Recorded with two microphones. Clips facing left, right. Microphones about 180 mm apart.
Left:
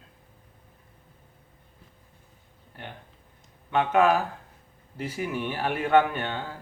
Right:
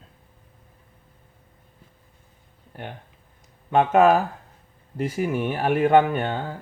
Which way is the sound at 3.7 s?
45° right (ahead or behind).